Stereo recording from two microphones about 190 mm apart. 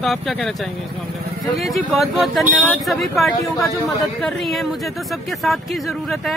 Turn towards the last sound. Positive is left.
turn(degrees=0)  # may be behind; listen again after turning